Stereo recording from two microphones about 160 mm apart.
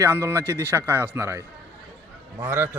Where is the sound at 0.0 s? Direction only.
15° right (ahead or behind).